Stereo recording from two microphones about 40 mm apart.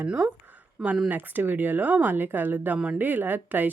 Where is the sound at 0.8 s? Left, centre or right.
Centre.